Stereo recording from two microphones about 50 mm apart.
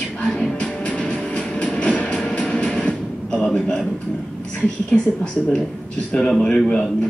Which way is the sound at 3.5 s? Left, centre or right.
Centre.